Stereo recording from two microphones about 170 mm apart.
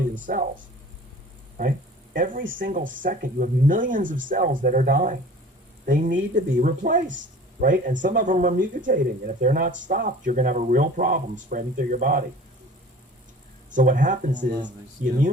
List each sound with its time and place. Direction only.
0.3 s speech: 50° right (ahead or behind)
2.1 s speech: 50° right (ahead or behind)
13.7 s speech: 50° right (ahead or behind)